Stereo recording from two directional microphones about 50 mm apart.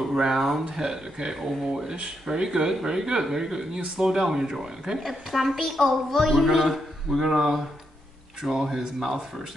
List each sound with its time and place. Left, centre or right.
0.1 s a woman's voice: centre